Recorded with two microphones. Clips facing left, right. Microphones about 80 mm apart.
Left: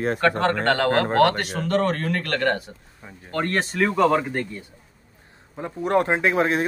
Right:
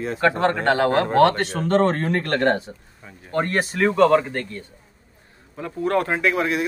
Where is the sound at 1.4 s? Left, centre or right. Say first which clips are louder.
Right 3 dB; right.